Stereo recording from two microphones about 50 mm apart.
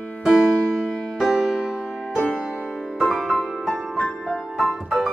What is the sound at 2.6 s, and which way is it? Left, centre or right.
Music, centre.